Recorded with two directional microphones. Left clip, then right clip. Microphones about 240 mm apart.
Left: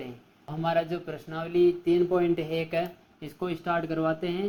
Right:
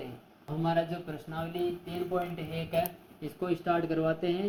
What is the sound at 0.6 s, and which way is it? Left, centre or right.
Speech, left.